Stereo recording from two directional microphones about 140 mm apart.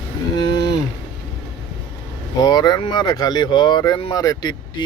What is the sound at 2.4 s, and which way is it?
Speech, 30° left (ahead or behind).